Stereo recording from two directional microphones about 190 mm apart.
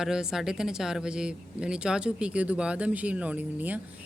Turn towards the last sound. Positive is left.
turn(degrees=-10)  # may be behind; listen again after turning